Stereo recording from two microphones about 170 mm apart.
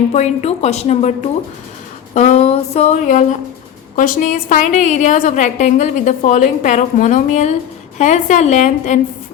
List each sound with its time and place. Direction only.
0.1 s a woman's voice: 40° left (ahead or behind)
2.1 s a sound: 40° left (ahead or behind)
3.9 s a woman's voice: 50° left (ahead or behind)